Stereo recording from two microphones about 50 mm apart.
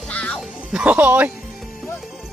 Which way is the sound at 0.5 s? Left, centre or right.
Centre.